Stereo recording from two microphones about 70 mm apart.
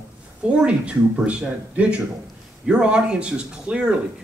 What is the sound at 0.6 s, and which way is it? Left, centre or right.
Speech, centre.